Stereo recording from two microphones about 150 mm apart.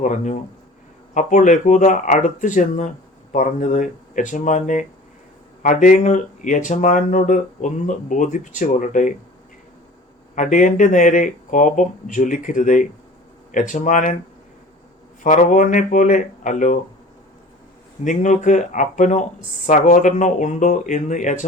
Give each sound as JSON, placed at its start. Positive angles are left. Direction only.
{"t": 0.0, "sound": "speech", "side_deg": 55}
{"t": 10.3, "sound": "speech", "side_deg": 60}
{"t": 15.2, "sound": "speech", "side_deg": 60}
{"t": 18.0, "sound": "speech", "side_deg": 55}